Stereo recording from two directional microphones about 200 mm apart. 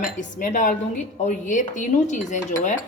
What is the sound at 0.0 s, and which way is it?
A woman's voice, 40° left (ahead or behind).